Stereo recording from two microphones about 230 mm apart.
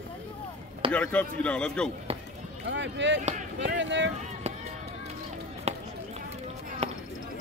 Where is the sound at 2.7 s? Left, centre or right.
Right.